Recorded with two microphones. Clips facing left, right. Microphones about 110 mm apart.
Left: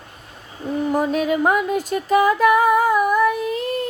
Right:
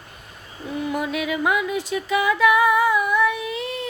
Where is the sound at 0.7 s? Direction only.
40° left (ahead or behind).